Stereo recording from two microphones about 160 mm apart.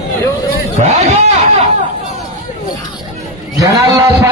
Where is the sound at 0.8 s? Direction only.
45° right (ahead or behind).